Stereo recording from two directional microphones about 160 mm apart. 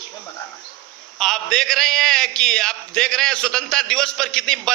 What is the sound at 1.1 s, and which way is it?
A man's voice, 5° left (ahead or behind).